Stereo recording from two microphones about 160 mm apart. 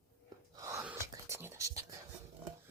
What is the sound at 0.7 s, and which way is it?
Whispering, 15° right (ahead or behind).